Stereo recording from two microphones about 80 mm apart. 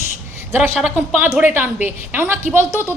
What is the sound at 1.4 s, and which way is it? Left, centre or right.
A woman's voice, right.